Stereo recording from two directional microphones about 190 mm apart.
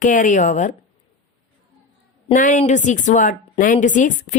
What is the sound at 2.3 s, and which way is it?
A woman's voice, 40° left (ahead or behind).